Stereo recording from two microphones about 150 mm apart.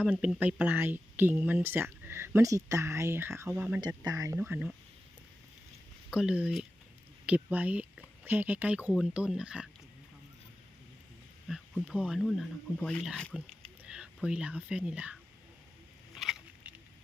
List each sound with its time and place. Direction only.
0.0 s speech: 5° right (ahead or behind)
3.8 s speech: 25° right (ahead or behind)
4.4 s speech: 10° right (ahead or behind)
6.1 s speech: 5° right (ahead or behind)
11.4 s speech: centre (ahead or behind)
13.1 s a sound: 5° left (ahead or behind)
13.9 s speech: 5° right (ahead or behind)
16.1 s patter: centre (ahead or behind)